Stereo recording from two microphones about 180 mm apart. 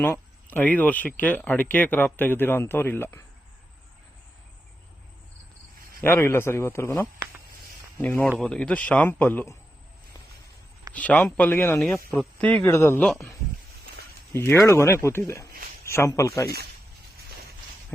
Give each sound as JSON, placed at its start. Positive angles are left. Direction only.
{"t": 0.0, "sound": "speech", "side_deg": 10}
{"t": 6.0, "sound": "speech", "side_deg": 15}
{"t": 10.9, "sound": "speech", "side_deg": 10}
{"t": 14.3, "sound": "speech", "side_deg": 10}